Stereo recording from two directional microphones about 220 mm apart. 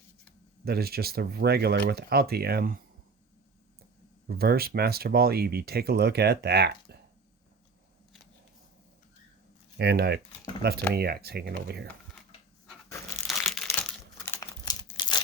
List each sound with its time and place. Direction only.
0.6 s speech: 45° right (ahead or behind)
4.3 s speech: 45° right (ahead or behind)
9.7 s speech: 45° right (ahead or behind)
13.2 s crushing: centre (ahead or behind)
14.3 s crumpling: 15° left (ahead or behind)